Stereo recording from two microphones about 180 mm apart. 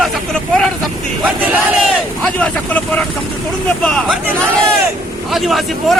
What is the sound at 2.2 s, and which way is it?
Speech, 5° left (ahead or behind).